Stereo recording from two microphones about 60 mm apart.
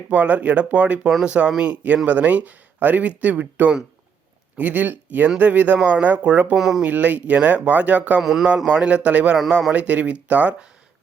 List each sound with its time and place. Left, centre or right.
0.1 s speech: right
6.6 s speech: centre
6.8 s speech: right
8.2 s a man's voice: centre; by 9.4 s right
9.5 s a man's voice: centre
9.7 s speech: right